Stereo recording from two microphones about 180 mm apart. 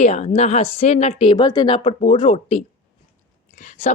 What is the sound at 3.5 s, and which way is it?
Speech, 45° left (ahead or behind).